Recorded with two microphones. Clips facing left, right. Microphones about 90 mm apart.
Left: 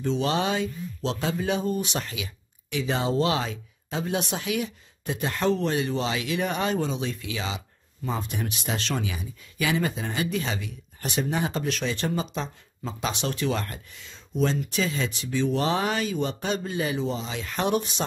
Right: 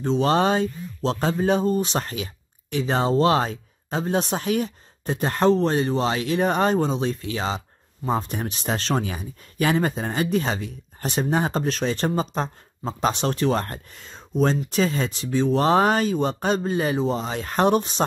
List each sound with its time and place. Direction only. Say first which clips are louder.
0.0 s speech: right 5 dB; 40° right (ahead or behind)